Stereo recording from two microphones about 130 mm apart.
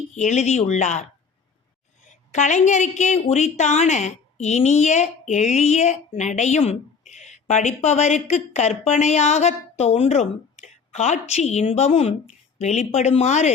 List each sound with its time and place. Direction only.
0.1 s a woman's voice: 65° left (ahead or behind)
2.0 s a woman's voice: 65° left (ahead or behind)